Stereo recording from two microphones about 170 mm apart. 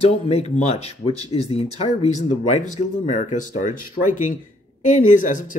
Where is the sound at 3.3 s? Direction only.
50° left (ahead or behind).